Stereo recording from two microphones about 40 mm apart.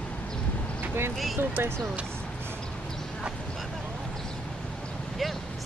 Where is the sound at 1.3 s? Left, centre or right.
Right.